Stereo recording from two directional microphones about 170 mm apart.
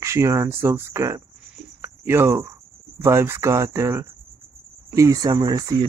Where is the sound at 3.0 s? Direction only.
15° right (ahead or behind).